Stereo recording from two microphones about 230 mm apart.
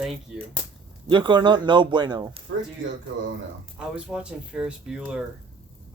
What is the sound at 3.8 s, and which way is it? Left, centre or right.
Speech, centre.